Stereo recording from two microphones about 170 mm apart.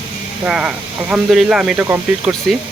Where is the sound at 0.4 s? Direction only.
5° right (ahead or behind).